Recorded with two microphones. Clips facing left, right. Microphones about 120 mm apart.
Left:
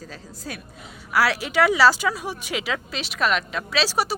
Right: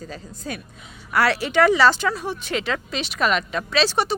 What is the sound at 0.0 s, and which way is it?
Speech, centre (ahead or behind).